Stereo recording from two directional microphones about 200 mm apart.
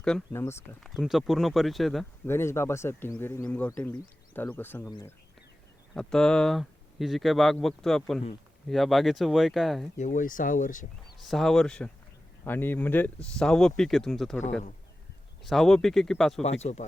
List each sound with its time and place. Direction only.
0.0 s speech: 10° left (ahead or behind)
0.8 s speech: centre (ahead or behind)
2.2 s speech: 10° left (ahead or behind)
5.9 s speech: 5° left (ahead or behind)
10.0 s speech: 40° left (ahead or behind)
11.2 s speech: centre (ahead or behind)
15.4 s speech: centre (ahead or behind)
16.4 s speech: 35° left (ahead or behind)